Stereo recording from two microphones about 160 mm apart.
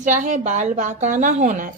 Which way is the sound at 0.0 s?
50° right (ahead or behind).